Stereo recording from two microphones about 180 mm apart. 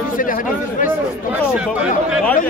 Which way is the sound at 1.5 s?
5° right (ahead or behind).